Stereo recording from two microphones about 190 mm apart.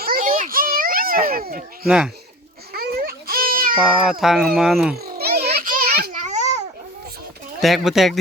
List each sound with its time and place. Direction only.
0.0 s a sound: 50° right (ahead or behind)
2.7 s baby cry: 50° right (ahead or behind)
4.2 s speech: centre (ahead or behind)
4.9 s babbling: 55° right (ahead or behind)
6.2 s babbling: 35° right (ahead or behind)
7.6 s speech: centre (ahead or behind)